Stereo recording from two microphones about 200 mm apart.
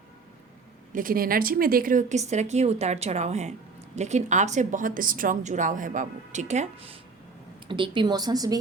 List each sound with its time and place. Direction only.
0.9 s a woman's voice: 45° right (ahead or behind)
7.7 s a woman's voice: 25° right (ahead or behind)